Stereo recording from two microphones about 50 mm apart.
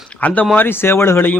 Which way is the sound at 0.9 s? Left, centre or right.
Left.